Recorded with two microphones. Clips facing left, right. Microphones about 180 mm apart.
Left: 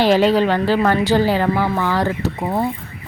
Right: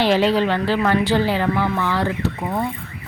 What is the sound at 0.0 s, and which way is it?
A woman's voice, 45° left (ahead or behind).